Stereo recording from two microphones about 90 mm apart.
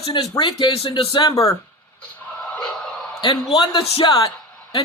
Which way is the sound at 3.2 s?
60° left (ahead or behind).